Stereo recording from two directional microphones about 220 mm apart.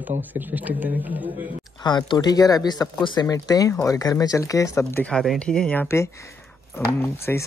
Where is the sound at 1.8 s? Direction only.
20° left (ahead or behind).